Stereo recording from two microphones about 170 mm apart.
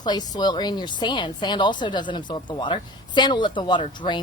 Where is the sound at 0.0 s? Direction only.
25° left (ahead or behind).